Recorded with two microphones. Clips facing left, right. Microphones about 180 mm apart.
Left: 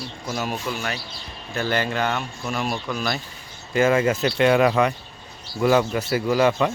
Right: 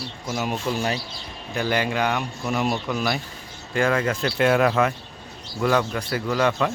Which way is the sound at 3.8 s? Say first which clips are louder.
Left 3 dB; 5° left (ahead or behind).